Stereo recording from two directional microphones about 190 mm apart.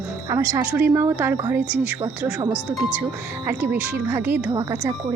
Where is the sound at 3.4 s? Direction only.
10° right (ahead or behind).